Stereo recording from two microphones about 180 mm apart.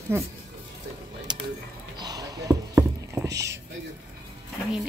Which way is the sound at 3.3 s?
75° right (ahead or behind).